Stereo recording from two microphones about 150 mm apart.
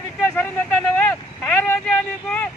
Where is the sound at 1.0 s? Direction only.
10° left (ahead or behind).